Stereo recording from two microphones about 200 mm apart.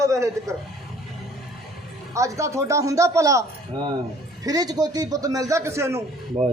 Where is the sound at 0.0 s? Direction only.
15° right (ahead or behind).